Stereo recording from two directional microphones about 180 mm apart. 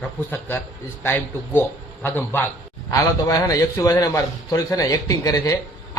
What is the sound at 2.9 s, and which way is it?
A man's voice, 20° left (ahead or behind).